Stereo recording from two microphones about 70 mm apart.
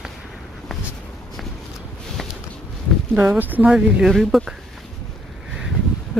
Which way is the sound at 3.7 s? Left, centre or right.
Centre.